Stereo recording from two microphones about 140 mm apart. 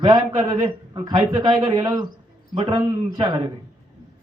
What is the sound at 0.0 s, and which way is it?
A man's voice, 30° right (ahead or behind).